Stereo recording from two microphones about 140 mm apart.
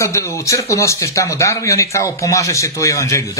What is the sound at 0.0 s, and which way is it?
Speech, 20° left (ahead or behind).